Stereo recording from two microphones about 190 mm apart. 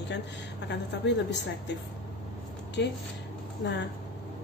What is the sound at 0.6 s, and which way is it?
A woman's voice, 65° left (ahead or behind).